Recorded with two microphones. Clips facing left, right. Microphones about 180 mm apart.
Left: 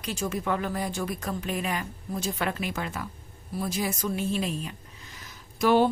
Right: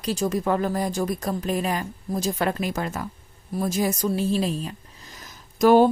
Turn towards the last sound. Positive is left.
turn(degrees=-45)  # may be behind; listen again after turning